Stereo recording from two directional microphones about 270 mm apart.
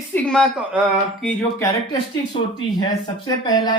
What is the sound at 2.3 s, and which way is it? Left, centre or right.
A woman's voice, centre.